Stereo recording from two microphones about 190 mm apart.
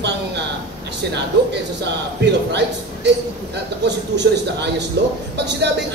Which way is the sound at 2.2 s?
65° right (ahead or behind).